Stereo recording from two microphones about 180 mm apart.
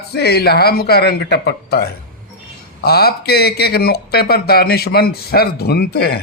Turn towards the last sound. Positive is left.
turn(degrees=60)  # may be behind; listen again after turning